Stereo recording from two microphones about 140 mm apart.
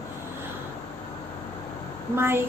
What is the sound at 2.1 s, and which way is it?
Speech, 15° right (ahead or behind).